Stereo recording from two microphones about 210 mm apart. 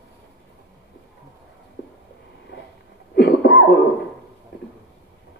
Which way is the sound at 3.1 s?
50° left (ahead or behind).